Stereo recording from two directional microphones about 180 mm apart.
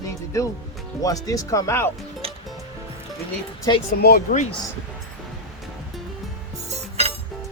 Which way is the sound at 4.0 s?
55° left (ahead or behind).